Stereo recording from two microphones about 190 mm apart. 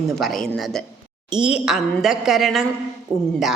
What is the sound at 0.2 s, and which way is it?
A woman's voice, centre (ahead or behind).